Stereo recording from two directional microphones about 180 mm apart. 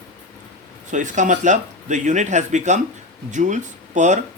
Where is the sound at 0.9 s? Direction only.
45° right (ahead or behind).